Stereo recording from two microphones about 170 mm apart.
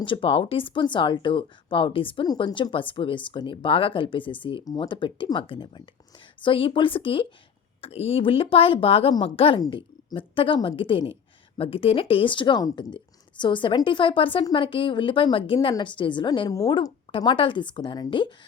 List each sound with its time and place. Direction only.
0.0 s a woman's voice: 30° left (ahead or behind)